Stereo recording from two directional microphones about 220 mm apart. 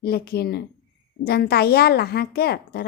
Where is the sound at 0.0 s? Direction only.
45° left (ahead or behind).